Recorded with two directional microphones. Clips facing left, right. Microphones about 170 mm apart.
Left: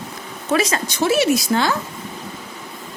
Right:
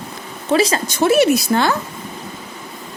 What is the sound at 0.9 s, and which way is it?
Speech, 55° right (ahead or behind).